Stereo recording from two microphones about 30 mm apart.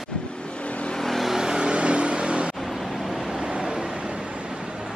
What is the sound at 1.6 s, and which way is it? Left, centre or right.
Vehicle, right.